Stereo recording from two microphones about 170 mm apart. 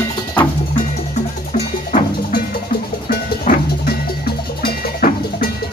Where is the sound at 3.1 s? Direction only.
60° left (ahead or behind).